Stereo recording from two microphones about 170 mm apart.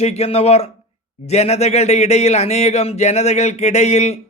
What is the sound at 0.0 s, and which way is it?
A man's voice, 40° left (ahead or behind).